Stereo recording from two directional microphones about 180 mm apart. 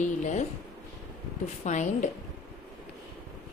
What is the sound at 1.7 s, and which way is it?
Speech, 40° left (ahead or behind).